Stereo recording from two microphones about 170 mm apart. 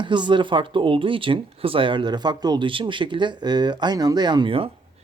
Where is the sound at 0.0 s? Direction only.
25° right (ahead or behind).